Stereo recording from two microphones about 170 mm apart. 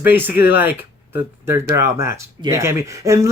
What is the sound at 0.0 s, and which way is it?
Speech, 10° right (ahead or behind).